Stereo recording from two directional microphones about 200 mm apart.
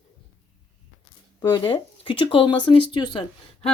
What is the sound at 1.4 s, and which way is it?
Speech, 20° left (ahead or behind).